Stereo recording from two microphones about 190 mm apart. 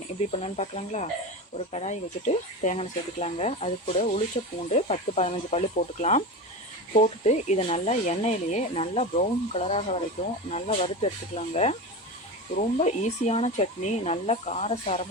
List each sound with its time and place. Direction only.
0.2 s speech: 35° left (ahead or behind)